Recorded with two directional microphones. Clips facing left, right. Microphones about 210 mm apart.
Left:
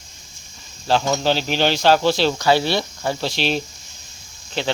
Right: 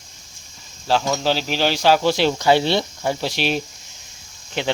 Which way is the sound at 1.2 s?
5° right (ahead or behind).